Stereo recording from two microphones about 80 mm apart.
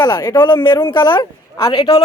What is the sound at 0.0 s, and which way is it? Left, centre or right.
Speech, left.